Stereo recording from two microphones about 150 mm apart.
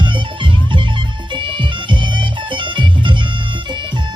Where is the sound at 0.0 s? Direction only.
35° right (ahead or behind).